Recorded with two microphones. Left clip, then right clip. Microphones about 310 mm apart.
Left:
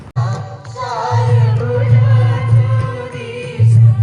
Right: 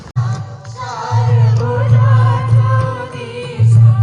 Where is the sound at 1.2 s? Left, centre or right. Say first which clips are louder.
Left 1 dB; right.